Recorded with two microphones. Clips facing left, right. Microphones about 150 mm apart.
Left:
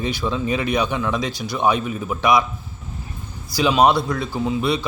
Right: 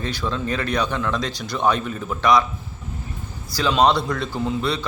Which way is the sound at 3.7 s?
10° left (ahead or behind).